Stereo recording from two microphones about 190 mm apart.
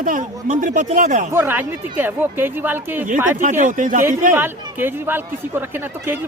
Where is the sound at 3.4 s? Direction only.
40° right (ahead or behind).